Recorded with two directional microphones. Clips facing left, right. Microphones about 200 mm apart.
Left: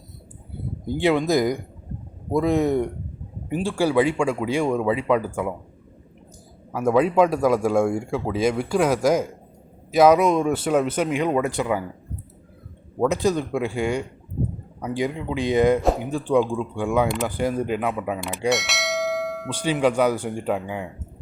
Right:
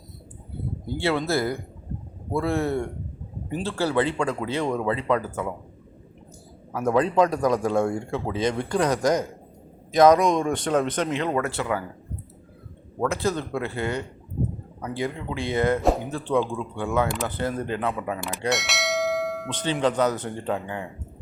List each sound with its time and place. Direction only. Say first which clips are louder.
0.9 s a man's voice: left 5 dB; 15° left (ahead or behind)
6.7 s a man's voice: left 3 dB; 10° left (ahead or behind)
13.0 s a man's voice: left 4 dB; 15° left (ahead or behind)
15.8 s speech: left 1 dB; centre (ahead or behind)
16.1 s a man's voice: left 4 dB; 15° left (ahead or behind)
18.2 s bell: left 3 dB; centre (ahead or behind)